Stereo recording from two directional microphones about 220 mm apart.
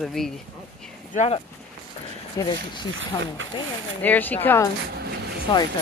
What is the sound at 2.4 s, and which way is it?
Speech, 15° left (ahead or behind).